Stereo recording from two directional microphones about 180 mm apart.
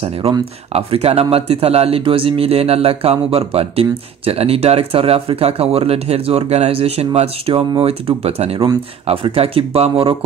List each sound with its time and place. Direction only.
0.7 s speech: 35° right (ahead or behind)